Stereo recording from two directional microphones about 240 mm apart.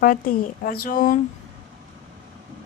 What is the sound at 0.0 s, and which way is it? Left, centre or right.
A woman's voice, left.